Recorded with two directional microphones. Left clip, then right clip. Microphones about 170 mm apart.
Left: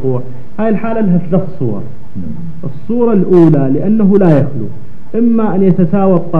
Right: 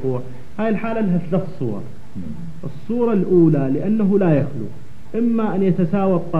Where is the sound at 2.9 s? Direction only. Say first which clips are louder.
Left 7 dB; 40° left (ahead or behind).